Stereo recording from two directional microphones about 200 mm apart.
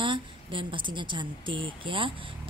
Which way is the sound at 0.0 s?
25° right (ahead or behind).